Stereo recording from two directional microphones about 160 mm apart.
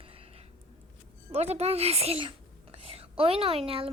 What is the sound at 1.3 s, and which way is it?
Speech, 40° right (ahead or behind).